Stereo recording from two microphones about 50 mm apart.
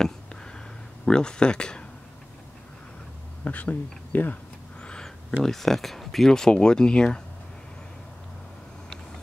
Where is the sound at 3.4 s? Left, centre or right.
Left.